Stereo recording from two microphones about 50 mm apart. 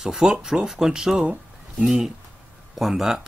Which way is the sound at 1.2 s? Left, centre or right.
Right.